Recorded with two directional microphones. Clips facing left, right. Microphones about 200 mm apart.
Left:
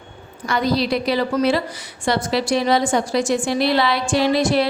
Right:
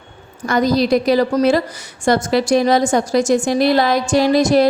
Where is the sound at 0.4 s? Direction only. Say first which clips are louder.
Right 5 dB; 45° right (ahead or behind).